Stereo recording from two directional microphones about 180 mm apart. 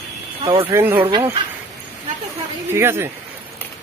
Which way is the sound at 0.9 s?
25° right (ahead or behind).